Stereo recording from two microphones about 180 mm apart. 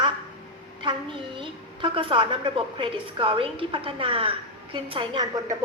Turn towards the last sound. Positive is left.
turn(degrees=-25)  # may be behind; listen again after turning